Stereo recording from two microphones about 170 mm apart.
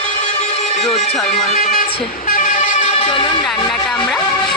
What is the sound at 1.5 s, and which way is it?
Speech, 50° left (ahead or behind).